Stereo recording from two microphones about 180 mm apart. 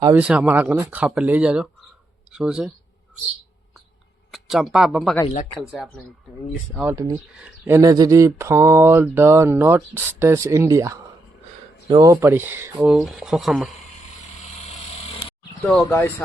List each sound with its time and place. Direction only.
0.2 s speech: 5° right (ahead or behind)
4.3 s speech: centre (ahead or behind)
6.9 s speech: 20° right (ahead or behind)
7.3 s speech: 5° right (ahead or behind)
7.8 s speech: 20° right (ahead or behind); by 13.7 s centre (ahead or behind)
15.8 s speech: 15° left (ahead or behind)